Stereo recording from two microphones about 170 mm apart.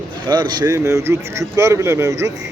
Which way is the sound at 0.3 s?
25° right (ahead or behind).